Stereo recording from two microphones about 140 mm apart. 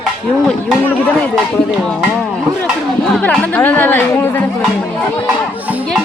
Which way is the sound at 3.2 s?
10° left (ahead or behind).